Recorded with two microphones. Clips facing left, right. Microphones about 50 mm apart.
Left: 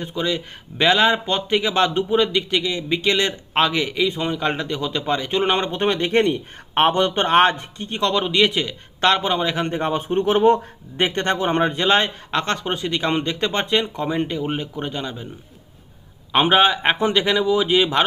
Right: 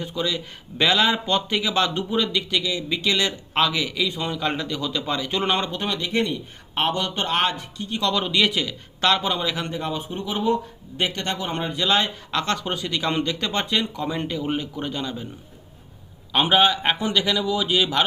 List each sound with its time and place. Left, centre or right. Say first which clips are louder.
0.0 s speech: left 3 dB; left
6.1 s a man's voice: left 6 dB; left
8.1 s a man's voice: left 3 dB; left
16.3 s speech: left 3 dB; left